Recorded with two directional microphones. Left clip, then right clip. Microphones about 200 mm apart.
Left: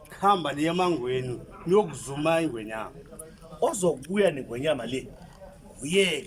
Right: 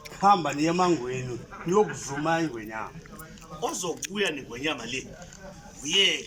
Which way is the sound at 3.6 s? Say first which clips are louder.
Left 6 dB; 65° left (ahead or behind).